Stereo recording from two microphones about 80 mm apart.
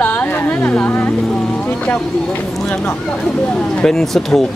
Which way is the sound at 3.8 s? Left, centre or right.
Centre.